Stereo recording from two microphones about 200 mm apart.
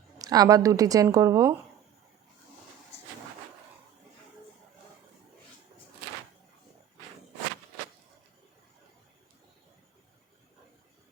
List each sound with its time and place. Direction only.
0.2 s a woman's voice: 20° right (ahead or behind)